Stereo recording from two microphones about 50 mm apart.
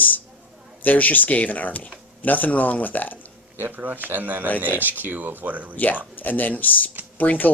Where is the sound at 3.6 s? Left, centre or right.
Right.